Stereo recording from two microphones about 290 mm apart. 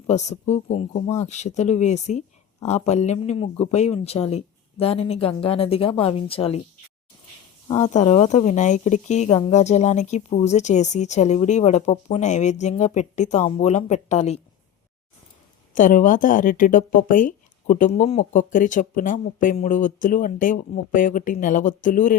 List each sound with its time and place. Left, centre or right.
0.1 s speech: left
7.7 s speech: left
15.7 s speech: left